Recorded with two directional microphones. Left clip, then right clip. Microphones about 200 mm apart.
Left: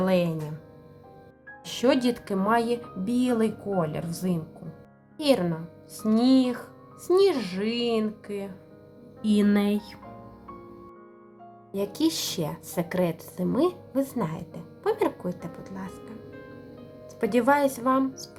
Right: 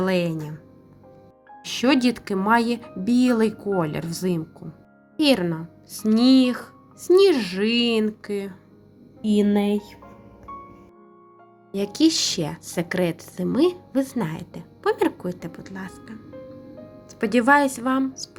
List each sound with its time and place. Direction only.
0.0 s a woman's voice: 10° right (ahead or behind)
1.6 s a woman's voice: 10° right (ahead or behind)
9.2 s a woman's voice: 5° right (ahead or behind)
11.7 s a woman's voice: 10° right (ahead or behind)
17.2 s a woman's voice: 10° right (ahead or behind)